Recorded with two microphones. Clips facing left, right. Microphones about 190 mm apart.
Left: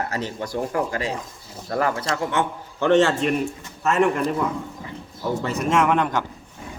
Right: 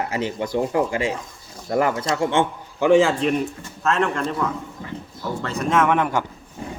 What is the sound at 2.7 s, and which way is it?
Speech, 10° right (ahead or behind).